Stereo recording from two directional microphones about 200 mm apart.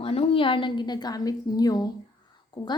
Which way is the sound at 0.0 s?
30° left (ahead or behind).